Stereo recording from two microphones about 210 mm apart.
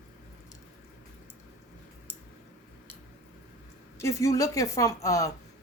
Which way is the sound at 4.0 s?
15° left (ahead or behind).